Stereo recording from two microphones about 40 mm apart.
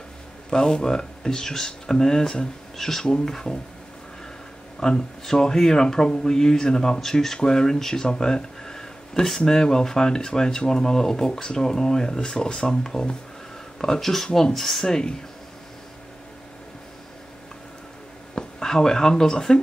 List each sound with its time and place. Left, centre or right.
0.5 s speech: centre
4.7 s speech: centre
14.9 s speech: centre
18.3 s speech: centre